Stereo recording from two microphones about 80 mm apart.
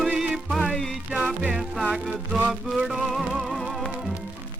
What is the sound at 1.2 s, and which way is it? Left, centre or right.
Speech, centre.